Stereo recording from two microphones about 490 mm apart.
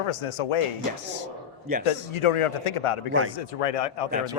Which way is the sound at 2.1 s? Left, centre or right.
Left.